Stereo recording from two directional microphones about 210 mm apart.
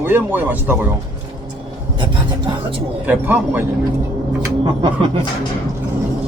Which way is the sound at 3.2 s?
10° right (ahead or behind).